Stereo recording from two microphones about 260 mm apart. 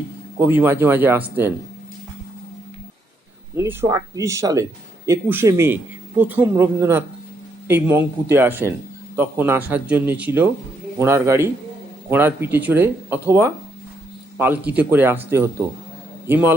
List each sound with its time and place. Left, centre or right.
0.3 s speech: centre
3.5 s a man's voice: centre